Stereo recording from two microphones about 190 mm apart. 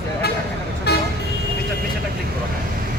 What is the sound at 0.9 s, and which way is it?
Vehicle, 55° left (ahead or behind).